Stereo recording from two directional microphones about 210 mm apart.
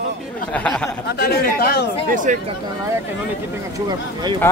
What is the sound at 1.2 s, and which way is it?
Speech, 50° left (ahead or behind).